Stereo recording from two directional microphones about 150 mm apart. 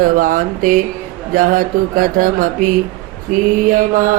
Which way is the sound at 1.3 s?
65° right (ahead or behind).